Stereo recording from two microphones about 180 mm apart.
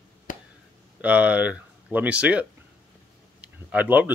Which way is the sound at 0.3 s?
50° left (ahead or behind).